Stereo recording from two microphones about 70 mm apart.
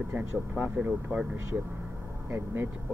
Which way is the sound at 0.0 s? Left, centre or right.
Right.